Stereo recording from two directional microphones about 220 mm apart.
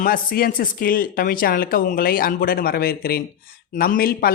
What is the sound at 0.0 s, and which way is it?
Speech, 40° left (ahead or behind).